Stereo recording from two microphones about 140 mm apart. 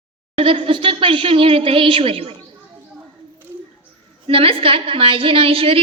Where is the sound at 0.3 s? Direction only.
40° right (ahead or behind).